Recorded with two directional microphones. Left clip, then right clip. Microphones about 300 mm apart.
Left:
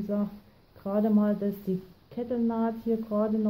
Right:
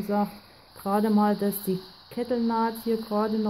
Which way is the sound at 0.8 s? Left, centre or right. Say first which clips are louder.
Right 3 dB; right.